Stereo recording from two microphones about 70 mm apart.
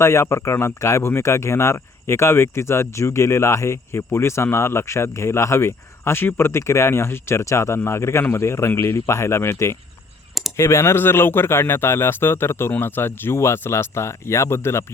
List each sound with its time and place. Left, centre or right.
0.0 s speech: left